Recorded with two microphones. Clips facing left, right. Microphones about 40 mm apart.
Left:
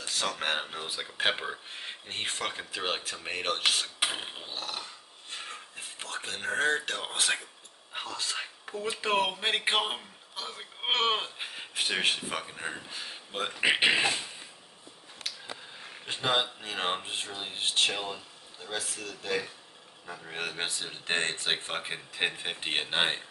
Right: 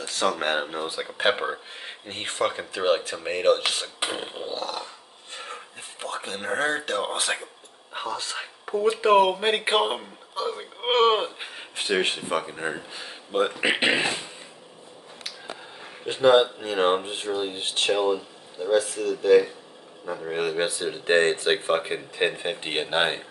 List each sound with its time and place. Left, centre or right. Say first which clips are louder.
0.0 s a sound: right 7 dB; centre
0.4 s a man's voice: right 6 dB; centre
1.7 s a man's voice: right 2 dB; centre
16.1 s a man's voice: right 11 dB; centre